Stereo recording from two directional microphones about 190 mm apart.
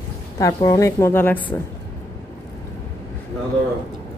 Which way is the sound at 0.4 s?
20° left (ahead or behind).